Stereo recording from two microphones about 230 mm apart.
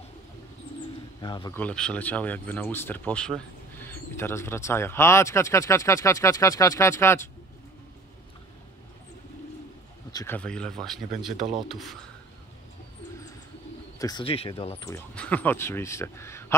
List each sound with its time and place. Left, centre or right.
1.2 s speech: centre
1.6 s speech: centre
10.1 s speech: centre
13.9 s speech: centre
14.9 s speech: centre